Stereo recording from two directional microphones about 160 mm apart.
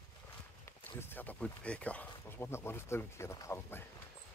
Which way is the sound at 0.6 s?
15° left (ahead or behind).